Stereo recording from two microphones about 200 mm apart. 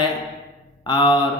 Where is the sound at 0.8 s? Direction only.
25° left (ahead or behind).